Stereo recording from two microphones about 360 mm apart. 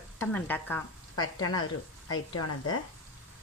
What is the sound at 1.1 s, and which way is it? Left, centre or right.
Speech, left.